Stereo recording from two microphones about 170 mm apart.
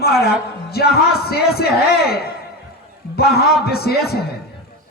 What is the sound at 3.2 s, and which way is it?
A man's voice, 65° left (ahead or behind).